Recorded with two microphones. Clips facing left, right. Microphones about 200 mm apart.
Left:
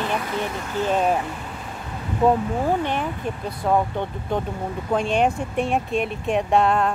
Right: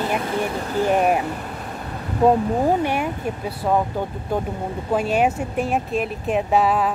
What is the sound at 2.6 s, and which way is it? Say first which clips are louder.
Speech: right 3 dB; 10° right (ahead or behind).